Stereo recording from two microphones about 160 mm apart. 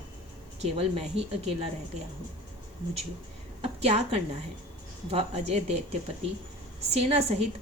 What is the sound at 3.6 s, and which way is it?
A woman's voice, 40° right (ahead or behind).